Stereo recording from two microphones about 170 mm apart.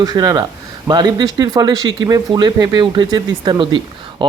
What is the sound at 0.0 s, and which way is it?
Speech, 20° right (ahead or behind).